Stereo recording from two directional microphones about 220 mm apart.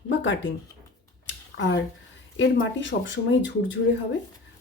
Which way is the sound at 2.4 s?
55° left (ahead or behind).